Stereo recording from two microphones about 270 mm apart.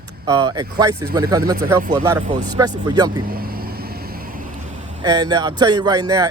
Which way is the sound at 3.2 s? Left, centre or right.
Right.